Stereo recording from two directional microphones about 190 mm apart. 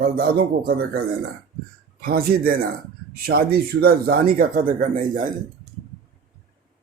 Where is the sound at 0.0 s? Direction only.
55° right (ahead or behind).